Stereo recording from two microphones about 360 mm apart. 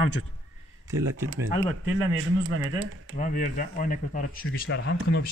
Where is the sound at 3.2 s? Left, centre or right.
Left.